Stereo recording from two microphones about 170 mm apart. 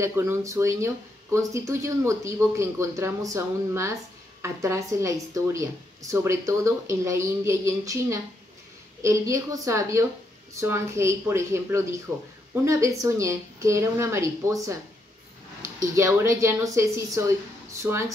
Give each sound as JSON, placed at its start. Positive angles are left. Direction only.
{"t": 0.0, "sound": "a woman's voice", "side_deg": -15}